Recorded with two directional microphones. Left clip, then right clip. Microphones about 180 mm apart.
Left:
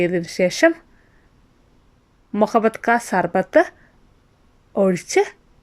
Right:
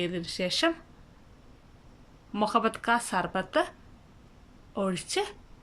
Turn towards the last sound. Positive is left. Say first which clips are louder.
# left 12 dB
turn(degrees=35)  # may be behind; listen again after turning